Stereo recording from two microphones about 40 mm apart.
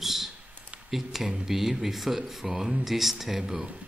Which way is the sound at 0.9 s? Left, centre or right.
Centre.